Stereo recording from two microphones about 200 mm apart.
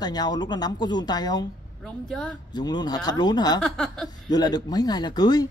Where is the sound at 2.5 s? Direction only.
20° left (ahead or behind).